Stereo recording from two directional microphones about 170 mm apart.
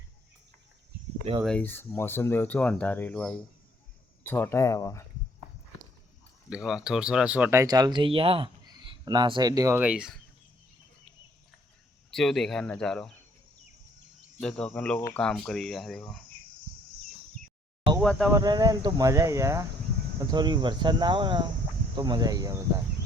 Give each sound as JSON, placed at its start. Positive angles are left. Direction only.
{"t": 1.5, "sound": "speech", "side_deg": 10}
{"t": 6.5, "sound": "speech", "side_deg": 0}
{"t": 9.8, "sound": "speech", "side_deg": -5}
{"t": 12.1, "sound": "speech", "side_deg": 0}
{"t": 14.4, "sound": "speech", "side_deg": 5}
{"t": 18.0, "sound": "speech", "side_deg": 5}
{"t": 18.3, "sound": "speech", "side_deg": -20}